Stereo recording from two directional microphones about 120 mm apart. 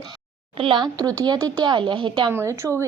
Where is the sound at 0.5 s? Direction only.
45° right (ahead or behind).